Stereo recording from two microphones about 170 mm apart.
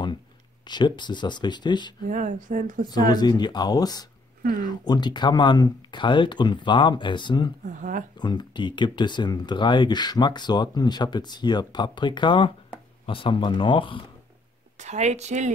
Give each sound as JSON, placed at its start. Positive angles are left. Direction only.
{"t": 0.7, "sound": "speech", "side_deg": 25}
{"t": 2.0, "sound": "speech", "side_deg": -50}
{"t": 3.1, "sound": "speech", "side_deg": 25}
{"t": 14.8, "sound": "a woman's voice", "side_deg": -40}